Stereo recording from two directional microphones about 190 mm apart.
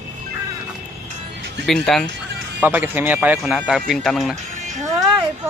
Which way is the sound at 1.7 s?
Centre (ahead or behind).